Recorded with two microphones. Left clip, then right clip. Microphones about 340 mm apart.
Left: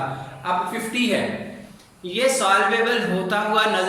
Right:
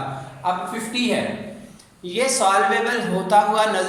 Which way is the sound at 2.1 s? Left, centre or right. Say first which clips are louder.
Even; centre.